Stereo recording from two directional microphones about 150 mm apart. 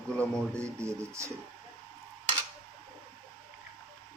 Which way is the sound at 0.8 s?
20° right (ahead or behind).